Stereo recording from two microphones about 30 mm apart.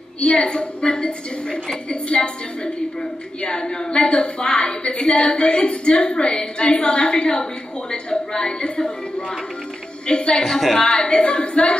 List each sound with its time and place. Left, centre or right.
0.3 s a woman's voice: left
0.6 s a woman's voice: left
10.0 s a woman's voice: left